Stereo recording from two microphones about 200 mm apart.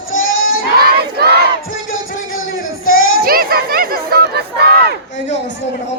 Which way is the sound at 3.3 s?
50° right (ahead or behind).